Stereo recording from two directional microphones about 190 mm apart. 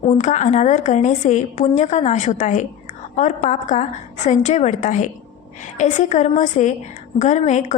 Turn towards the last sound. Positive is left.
turn(degrees=35)  # may be behind; listen again after turning